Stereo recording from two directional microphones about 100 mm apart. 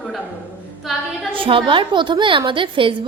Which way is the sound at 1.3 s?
60° right (ahead or behind).